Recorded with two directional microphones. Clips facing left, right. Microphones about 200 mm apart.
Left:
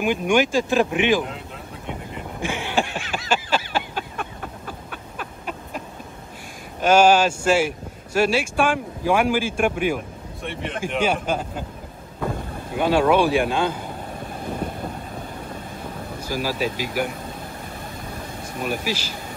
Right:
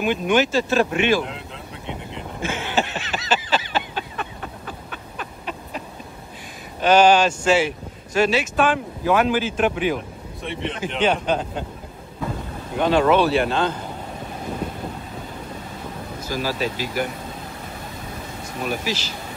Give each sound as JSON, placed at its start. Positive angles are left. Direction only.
{"t": 0.0, "sound": "speech", "side_deg": 10}
{"t": 1.9, "sound": "a sound", "side_deg": 10}
{"t": 6.8, "sound": "speech", "side_deg": 10}
{"t": 12.7, "sound": "speech", "side_deg": 5}
{"t": 16.2, "sound": "speech", "side_deg": 10}
{"t": 18.6, "sound": "speech", "side_deg": 10}